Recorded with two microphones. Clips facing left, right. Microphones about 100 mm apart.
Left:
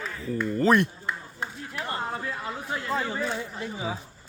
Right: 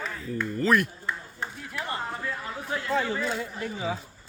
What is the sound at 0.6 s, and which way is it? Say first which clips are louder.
Speech: left 2 dB; 30° left (ahead or behind).